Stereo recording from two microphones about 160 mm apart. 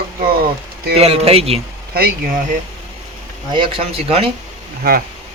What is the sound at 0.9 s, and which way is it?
Speech, 40° right (ahead or behind).